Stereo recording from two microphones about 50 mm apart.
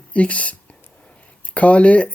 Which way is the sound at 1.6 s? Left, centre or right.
Left.